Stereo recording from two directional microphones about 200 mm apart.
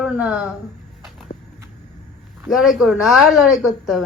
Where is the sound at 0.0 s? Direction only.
5° right (ahead or behind).